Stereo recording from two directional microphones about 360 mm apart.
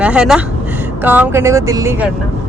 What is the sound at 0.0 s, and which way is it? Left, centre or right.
Speech, centre.